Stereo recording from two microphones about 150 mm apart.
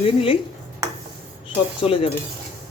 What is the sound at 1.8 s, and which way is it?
Speech, 35° left (ahead or behind).